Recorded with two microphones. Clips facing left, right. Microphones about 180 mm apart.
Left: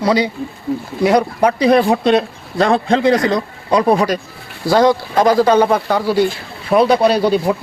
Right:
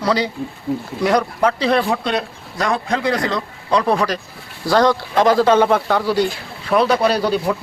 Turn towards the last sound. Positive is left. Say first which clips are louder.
# left 4 dB
turn(degrees=10)  # may be behind; listen again after turning